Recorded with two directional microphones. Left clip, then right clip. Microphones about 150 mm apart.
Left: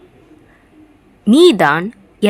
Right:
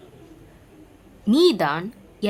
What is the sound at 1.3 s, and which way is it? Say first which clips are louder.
Speech: left 9 dB; 50° left (ahead or behind).